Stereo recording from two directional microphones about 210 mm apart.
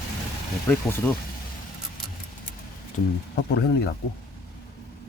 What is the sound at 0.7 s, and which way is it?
Speech, 10° left (ahead or behind).